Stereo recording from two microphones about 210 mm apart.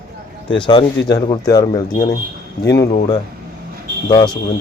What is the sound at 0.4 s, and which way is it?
Speech, 20° left (ahead or behind).